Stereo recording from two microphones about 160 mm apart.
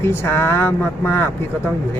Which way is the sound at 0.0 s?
15° left (ahead or behind).